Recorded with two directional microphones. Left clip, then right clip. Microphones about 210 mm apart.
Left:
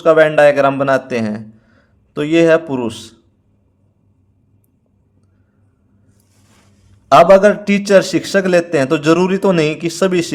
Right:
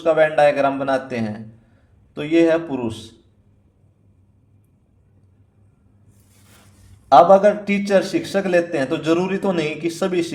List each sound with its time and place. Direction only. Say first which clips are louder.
0.0 s a man's voice: left 6 dB; 35° left (ahead or behind)
7.1 s a man's voice: left 4 dB; 35° left (ahead or behind)